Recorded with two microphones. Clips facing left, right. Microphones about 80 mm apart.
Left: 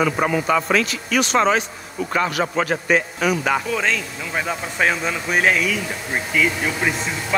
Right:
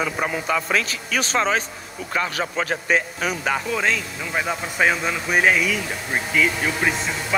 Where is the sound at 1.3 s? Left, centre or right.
Left.